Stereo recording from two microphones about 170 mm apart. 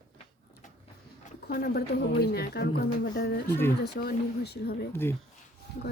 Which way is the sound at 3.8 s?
70° left (ahead or behind).